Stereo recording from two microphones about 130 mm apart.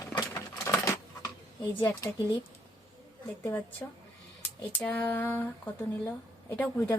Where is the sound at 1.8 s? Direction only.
20° left (ahead or behind).